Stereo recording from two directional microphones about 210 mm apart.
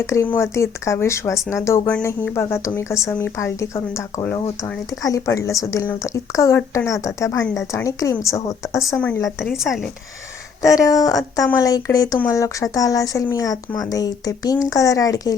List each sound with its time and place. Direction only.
0.0 s a woman's voice: 15° left (ahead or behind)
10.6 s speech: 15° left (ahead or behind)